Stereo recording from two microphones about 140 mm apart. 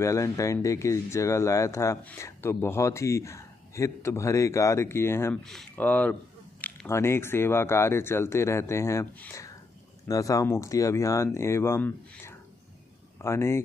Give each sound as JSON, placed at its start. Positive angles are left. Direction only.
{"t": 0.0, "sound": "speech", "side_deg": 20}
{"t": 5.3, "sound": "speech", "side_deg": 5}